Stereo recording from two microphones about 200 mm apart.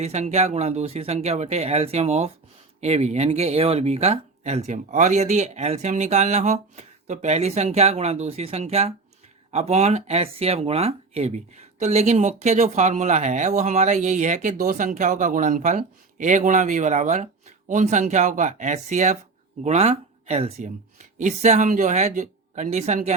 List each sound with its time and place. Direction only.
0.0 s speech: 35° right (ahead or behind)